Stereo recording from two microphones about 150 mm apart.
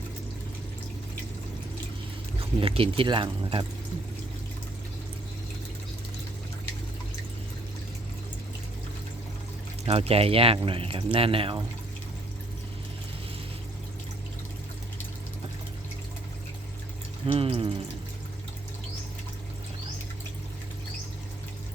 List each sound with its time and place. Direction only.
2.6 s speech: 40° right (ahead or behind)
9.8 s speech: 40° right (ahead or behind)
17.3 s speech: 40° right (ahead or behind)